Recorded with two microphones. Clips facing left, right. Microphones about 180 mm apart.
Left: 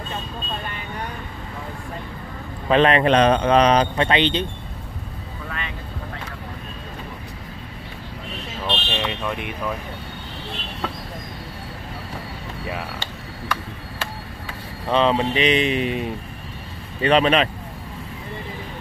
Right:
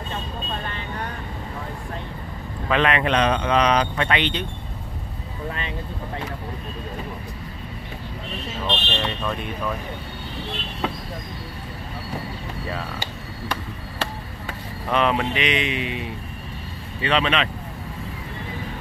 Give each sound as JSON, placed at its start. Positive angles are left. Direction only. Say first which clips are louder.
{"t": 2.7, "sound": "speech", "louder": "left 5 dB", "side_deg": 35}
{"t": 8.6, "sound": "speech", "louder": "left 1 dB", "side_deg": 10}
{"t": 14.9, "sound": "speech", "louder": "left 3 dB", "side_deg": 25}